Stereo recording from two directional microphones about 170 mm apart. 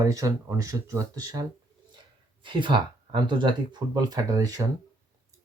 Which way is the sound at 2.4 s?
30° right (ahead or behind).